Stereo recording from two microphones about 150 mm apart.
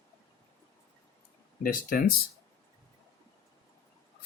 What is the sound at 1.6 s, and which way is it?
Speech, 70° left (ahead or behind).